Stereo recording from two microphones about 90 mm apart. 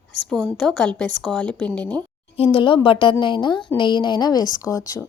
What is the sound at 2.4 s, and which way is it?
A woman's voice, 70° left (ahead or behind).